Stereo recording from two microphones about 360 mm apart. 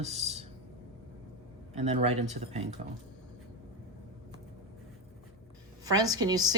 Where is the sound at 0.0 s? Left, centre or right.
Centre.